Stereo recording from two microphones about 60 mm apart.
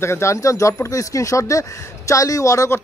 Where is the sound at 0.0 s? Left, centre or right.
Left.